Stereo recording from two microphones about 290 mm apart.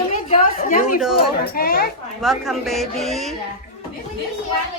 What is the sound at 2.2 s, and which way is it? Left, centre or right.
Speech, centre.